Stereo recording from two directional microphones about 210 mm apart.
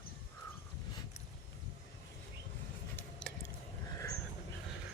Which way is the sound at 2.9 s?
5° left (ahead or behind).